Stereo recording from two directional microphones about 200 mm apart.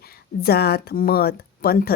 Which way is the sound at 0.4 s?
50° left (ahead or behind).